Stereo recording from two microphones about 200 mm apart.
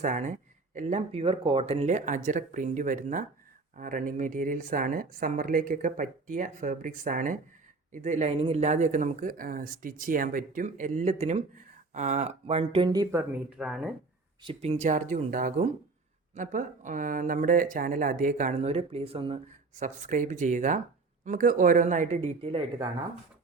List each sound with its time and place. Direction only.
0.0 s speech: 40° right (ahead or behind); by 13.2 s 15° right (ahead or behind)
13.6 s speech: centre (ahead or behind)
14.4 s speech: 30° right (ahead or behind)